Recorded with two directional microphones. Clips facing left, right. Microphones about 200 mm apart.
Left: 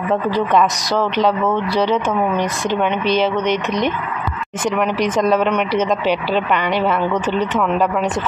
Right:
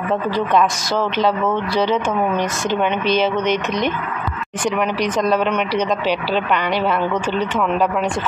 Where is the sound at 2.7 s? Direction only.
5° right (ahead or behind).